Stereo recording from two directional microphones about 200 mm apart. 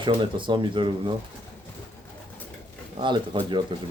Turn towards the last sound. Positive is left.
turn(degrees=-25)  # may be behind; listen again after turning